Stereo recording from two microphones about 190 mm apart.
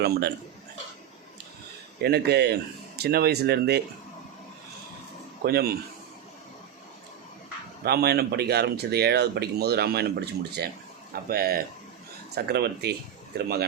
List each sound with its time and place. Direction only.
0.0 s speech: 55° right (ahead or behind)
2.0 s speech: 60° right (ahead or behind)
5.4 s speech: 55° right (ahead or behind)
7.9 s speech: 55° right (ahead or behind)